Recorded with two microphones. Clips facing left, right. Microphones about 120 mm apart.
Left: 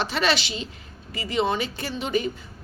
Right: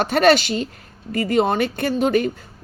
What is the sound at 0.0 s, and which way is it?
A woman's voice, 50° right (ahead or behind).